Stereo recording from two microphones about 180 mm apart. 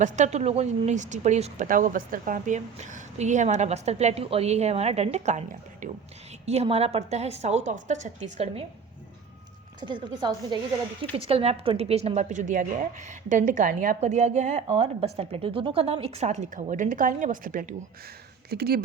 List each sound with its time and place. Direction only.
0.0 s a woman's voice: 40° right (ahead or behind)
6.4 s a woman's voice: 35° right (ahead or behind)
9.8 s a woman's voice: 25° right (ahead or behind); by 17.7 s 50° right (ahead or behind)
18.5 s speech: 60° right (ahead or behind)